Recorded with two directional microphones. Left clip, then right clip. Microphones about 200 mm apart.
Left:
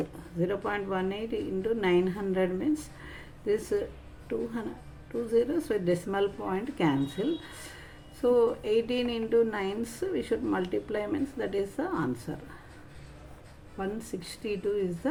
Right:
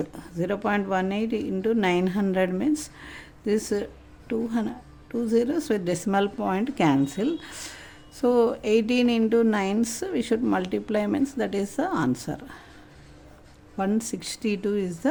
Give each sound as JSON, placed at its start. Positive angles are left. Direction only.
{"t": 0.3, "sound": "speech", "side_deg": -50}
{"t": 13.7, "sound": "speech", "side_deg": -50}